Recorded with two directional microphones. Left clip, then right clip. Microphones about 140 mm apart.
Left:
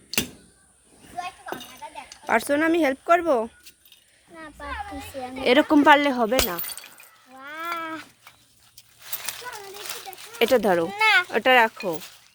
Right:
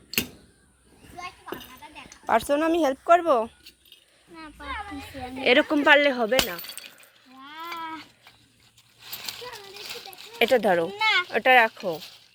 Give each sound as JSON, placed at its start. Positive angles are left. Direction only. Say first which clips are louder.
{"t": 1.1, "sound": "children playing", "louder": "left 5 dB", "side_deg": 30}
{"t": 2.2, "sound": "speech", "louder": "left 1 dB", "side_deg": 10}
{"t": 5.4, "sound": "speech", "louder": "left 2 dB", "side_deg": 20}
{"t": 7.4, "sound": "a sound", "louder": "left 4 dB", "side_deg": 45}
{"t": 9.7, "sound": "children playing", "louder": "left 2 dB", "side_deg": 20}
{"t": 11.0, "sound": "a sound", "louder": "left 5 dB", "side_deg": 45}
{"t": 11.3, "sound": "speech", "louder": "even", "side_deg": 25}
{"t": 11.7, "sound": "speech", "louder": "left 1 dB", "side_deg": 10}